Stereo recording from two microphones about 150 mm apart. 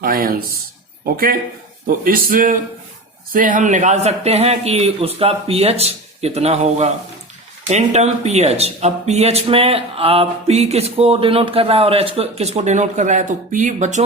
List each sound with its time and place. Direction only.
0.0 s a man's voice: 80° right; by 14.0 s 55° right (ahead or behind)